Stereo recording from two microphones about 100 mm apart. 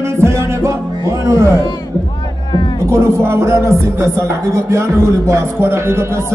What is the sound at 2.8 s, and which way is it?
Music, 25° right (ahead or behind).